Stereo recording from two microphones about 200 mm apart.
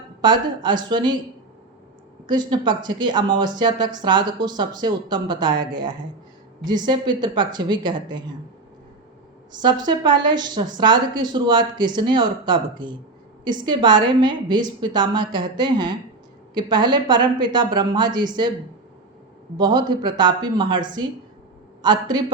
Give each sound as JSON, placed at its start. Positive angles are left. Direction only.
{"t": 0.2, "sound": "a woman's voice", "side_deg": -20}
{"t": 2.2, "sound": "a woman's voice", "side_deg": -20}
{"t": 9.6, "sound": "a woman's voice", "side_deg": -20}
{"t": 19.5, "sound": "a woman's voice", "side_deg": -20}